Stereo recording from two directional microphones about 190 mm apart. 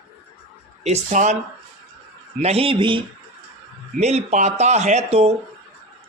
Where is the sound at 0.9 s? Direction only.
40° right (ahead or behind).